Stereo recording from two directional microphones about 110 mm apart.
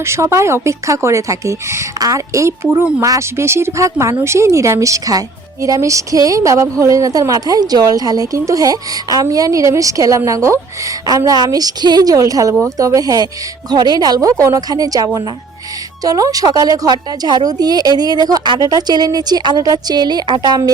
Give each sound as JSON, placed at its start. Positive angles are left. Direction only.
{"t": 0.0, "sound": "speech", "side_deg": -25}
{"t": 2.6, "sound": "speech", "side_deg": -15}
{"t": 3.0, "sound": "a woman's voice", "side_deg": -30}